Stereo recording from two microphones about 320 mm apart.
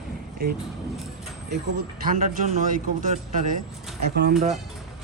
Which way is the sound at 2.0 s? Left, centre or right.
Right.